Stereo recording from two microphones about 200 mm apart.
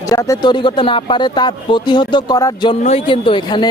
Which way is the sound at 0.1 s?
15° left (ahead or behind).